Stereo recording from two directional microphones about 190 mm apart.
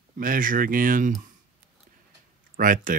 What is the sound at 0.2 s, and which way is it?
Speech, 45° right (ahead or behind).